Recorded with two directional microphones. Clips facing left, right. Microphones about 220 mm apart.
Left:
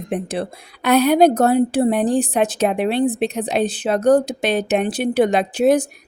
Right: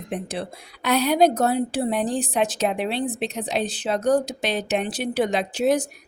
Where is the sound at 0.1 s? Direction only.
55° left (ahead or behind).